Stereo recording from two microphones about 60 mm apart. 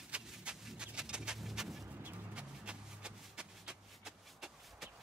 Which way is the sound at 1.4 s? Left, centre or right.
Centre.